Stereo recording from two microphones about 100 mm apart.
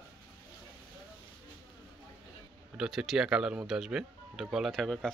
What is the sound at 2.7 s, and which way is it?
Speech, centre (ahead or behind).